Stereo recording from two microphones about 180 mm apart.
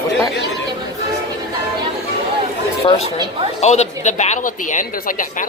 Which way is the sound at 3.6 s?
40° left (ahead or behind).